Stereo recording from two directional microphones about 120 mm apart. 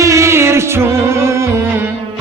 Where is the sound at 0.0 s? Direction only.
25° right (ahead or behind).